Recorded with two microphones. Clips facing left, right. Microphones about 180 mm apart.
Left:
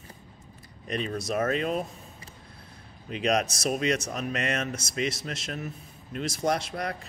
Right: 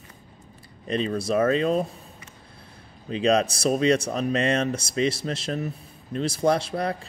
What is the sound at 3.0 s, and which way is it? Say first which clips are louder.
Speech: right 5 dB; 30° right (ahead or behind).